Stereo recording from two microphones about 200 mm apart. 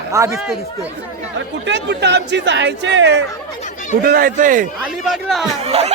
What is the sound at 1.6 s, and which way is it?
Speech, 60° right (ahead or behind).